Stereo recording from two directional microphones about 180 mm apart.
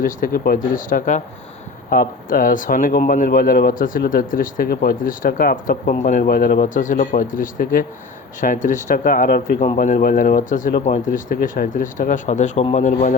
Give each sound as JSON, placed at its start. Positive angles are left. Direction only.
{"t": 0.3, "sound": "a man's voice", "side_deg": 55}